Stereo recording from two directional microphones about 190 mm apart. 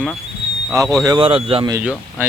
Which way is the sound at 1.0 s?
25° right (ahead or behind).